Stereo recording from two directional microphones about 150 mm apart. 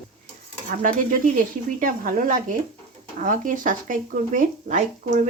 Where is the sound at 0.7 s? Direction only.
60° right (ahead or behind).